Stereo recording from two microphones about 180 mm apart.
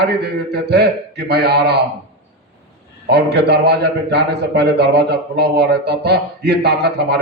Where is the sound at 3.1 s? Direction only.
65° right (ahead or behind).